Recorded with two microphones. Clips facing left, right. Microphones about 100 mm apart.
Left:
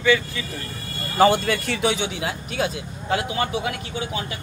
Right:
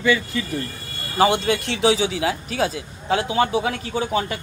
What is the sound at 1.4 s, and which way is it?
Speech, 70° right (ahead or behind).